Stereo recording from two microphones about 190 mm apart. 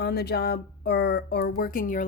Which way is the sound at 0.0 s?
60° left (ahead or behind).